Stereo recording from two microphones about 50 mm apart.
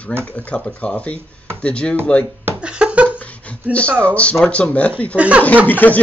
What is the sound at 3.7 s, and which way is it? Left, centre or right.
A man's voice, left.